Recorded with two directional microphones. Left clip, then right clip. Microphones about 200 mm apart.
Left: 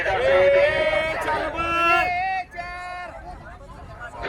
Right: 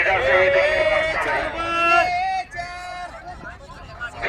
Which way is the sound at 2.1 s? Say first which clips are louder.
Right 2 dB; 50° right (ahead or behind).